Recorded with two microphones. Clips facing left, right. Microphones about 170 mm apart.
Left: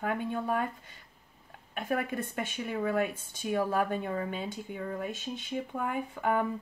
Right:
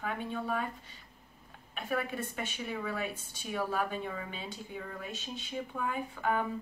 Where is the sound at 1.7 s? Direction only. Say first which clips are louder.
Left 3 dB; 50° left (ahead or behind).